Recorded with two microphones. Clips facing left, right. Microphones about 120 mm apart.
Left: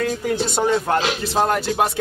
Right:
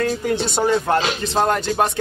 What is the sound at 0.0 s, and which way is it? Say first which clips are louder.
Speech: right 1 dB; 5° left (ahead or behind).